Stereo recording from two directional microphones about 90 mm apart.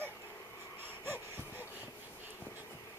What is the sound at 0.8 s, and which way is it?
Wheeze, 25° right (ahead or behind).